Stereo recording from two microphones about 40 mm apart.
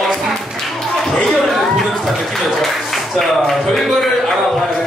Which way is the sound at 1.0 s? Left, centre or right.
Centre.